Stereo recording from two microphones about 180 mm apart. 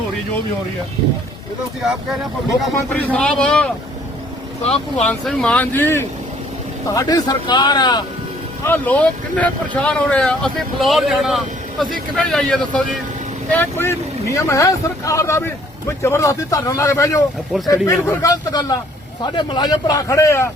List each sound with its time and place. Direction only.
1.8 s speech: centre (ahead or behind)
2.7 s speech: 10° left (ahead or behind)
4.6 s speech: 35° left (ahead or behind)
5.0 s speech: 5° left (ahead or behind); by 8.0 s 25° left (ahead or behind)
8.6 s speech: 10° left (ahead or behind)
17.5 s speech: centre (ahead or behind)
18.0 s speech: 20° left (ahead or behind)